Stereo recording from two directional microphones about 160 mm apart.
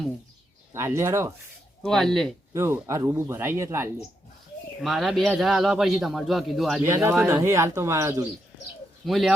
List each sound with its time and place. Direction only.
0.7 s speech: 15° right (ahead or behind)
1.8 s a man's voice: centre (ahead or behind)
2.5 s speech: 15° right (ahead or behind)
4.8 s a man's voice: centre (ahead or behind)
6.8 s speech: 15° right (ahead or behind)
9.0 s a man's voice: centre (ahead or behind)